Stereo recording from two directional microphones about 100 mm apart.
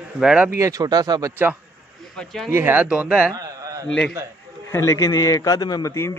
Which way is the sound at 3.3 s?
40° right (ahead or behind).